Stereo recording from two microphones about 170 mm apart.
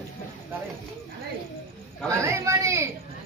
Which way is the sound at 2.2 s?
15° right (ahead or behind).